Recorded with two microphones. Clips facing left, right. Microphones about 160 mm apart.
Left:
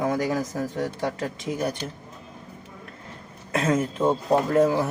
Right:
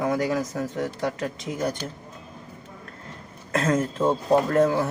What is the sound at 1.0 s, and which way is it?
Speech, 20° left (ahead or behind).